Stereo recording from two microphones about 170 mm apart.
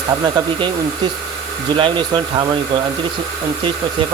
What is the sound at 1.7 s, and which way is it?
Speech, 30° right (ahead or behind).